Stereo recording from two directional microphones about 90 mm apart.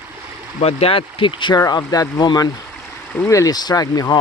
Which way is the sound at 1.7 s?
45° left (ahead or behind).